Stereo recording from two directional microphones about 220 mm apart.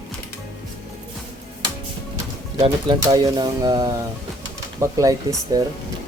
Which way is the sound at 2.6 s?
20° right (ahead or behind).